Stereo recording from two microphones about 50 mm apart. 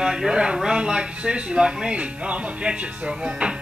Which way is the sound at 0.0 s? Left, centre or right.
Centre.